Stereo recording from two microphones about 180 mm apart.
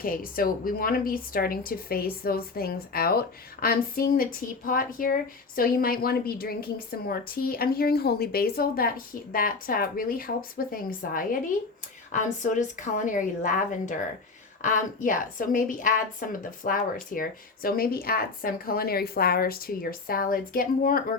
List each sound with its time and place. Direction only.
0.0 s a woman's voice: 55° left (ahead or behind)